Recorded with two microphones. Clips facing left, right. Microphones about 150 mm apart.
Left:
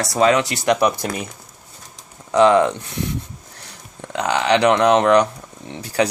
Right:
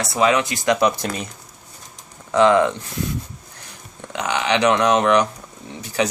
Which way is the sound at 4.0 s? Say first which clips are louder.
Left 3 dB; 35° left (ahead or behind).